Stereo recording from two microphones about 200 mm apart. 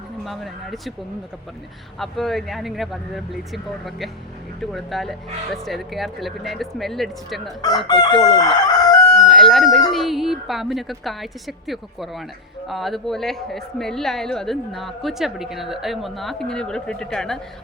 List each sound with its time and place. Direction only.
0.3 s a woman's voice: centre (ahead or behind)
2.0 s a woman's voice: centre (ahead or behind)
7.6 s chicken: 20° left (ahead or behind)
8.2 s crowing: 20° left (ahead or behind)
9.0 s crowing: centre (ahead or behind)
9.9 s a woman's voice: centre (ahead or behind)